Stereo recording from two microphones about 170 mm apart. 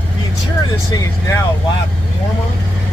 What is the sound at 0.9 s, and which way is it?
Speech, 20° left (ahead or behind).